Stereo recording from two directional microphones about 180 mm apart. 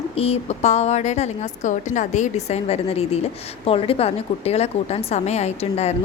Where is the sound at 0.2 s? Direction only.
35° left (ahead or behind).